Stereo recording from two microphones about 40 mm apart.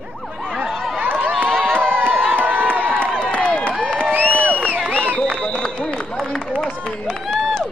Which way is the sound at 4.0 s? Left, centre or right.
Right.